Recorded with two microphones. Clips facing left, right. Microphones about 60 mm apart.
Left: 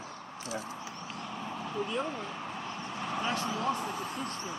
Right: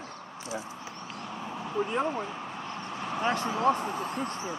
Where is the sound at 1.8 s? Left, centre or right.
Right.